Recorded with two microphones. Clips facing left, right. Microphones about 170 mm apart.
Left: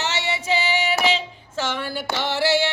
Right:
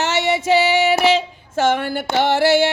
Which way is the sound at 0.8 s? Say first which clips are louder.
Right 7 dB; 45° right (ahead or behind).